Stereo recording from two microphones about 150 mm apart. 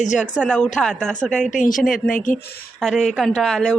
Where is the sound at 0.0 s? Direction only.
55° left (ahead or behind).